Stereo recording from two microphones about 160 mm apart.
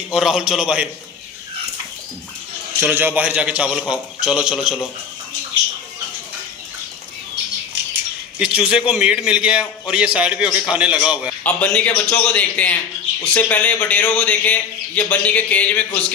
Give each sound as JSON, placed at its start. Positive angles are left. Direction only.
{"t": 0.1, "sound": "a man's voice", "side_deg": -5}
{"t": 2.8, "sound": "a man's voice", "side_deg": -10}
{"t": 8.4, "sound": "a man's voice", "side_deg": -5}
{"t": 11.4, "sound": "a man's voice", "side_deg": 10}